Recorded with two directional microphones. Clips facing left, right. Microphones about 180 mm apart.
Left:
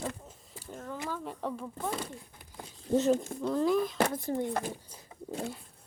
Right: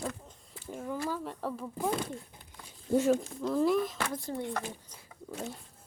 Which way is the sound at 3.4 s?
Centre (ahead or behind).